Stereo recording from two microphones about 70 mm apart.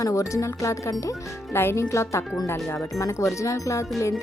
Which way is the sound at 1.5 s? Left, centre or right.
Left.